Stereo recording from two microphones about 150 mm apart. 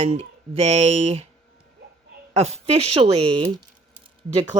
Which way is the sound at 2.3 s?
45° right (ahead or behind).